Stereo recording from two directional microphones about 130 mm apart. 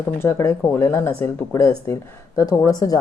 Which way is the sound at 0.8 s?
20° left (ahead or behind).